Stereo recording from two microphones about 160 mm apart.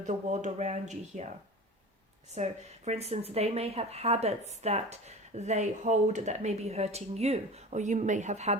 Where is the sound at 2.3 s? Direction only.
40° right (ahead or behind).